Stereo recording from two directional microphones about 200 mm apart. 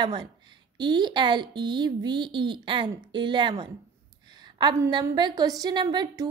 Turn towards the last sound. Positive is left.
turn(degrees=-20)  # may be behind; listen again after turning